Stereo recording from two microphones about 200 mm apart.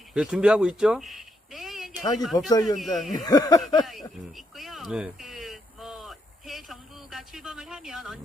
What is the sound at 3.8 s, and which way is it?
Speech, centre (ahead or behind).